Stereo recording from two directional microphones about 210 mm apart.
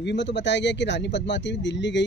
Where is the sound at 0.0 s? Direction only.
55° left (ahead or behind).